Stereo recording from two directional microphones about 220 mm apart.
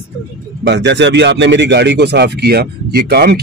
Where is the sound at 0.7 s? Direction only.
50° right (ahead or behind).